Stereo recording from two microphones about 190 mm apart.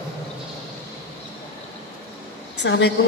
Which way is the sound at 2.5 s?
65° left (ahead or behind).